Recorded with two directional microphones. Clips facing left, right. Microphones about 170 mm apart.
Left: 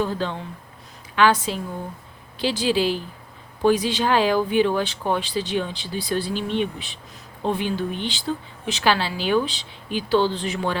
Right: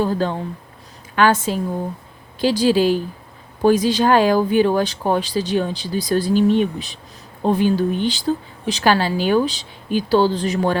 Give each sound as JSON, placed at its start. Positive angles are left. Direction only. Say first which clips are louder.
{"t": 0.0, "sound": "speech", "louder": "right 5 dB", "side_deg": -45}